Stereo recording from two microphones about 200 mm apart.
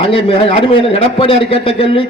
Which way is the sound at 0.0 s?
25° left (ahead or behind).